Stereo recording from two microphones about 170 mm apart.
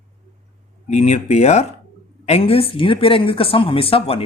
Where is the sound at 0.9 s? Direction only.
40° left (ahead or behind).